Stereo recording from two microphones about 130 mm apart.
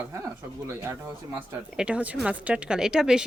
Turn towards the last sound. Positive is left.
turn(degrees=-5)  # may be behind; listen again after turning